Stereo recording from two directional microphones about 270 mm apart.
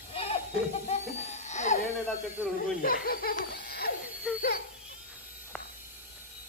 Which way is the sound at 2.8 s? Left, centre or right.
Left.